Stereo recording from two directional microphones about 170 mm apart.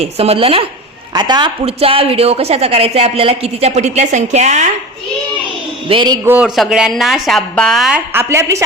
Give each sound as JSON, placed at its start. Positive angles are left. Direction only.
{"t": 0.0, "sound": "a woman's voice", "side_deg": -35}
{"t": 5.9, "sound": "a man's voice", "side_deg": -30}
{"t": 6.2, "sound": "a woman's voice", "side_deg": -10}